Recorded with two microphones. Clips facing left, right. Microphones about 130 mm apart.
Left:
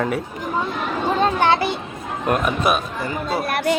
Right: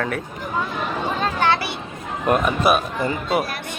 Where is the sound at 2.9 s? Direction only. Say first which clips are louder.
Right 2 dB; 20° right (ahead or behind).